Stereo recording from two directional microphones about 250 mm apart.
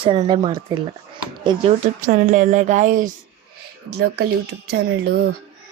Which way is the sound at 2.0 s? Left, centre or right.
Right.